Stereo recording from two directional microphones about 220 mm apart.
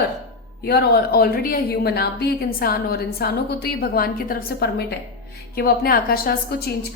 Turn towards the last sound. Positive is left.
turn(degrees=45)  # may be behind; listen again after turning